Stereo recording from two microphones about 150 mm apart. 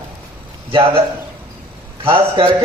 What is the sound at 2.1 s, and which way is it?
Speech, 30° right (ahead or behind).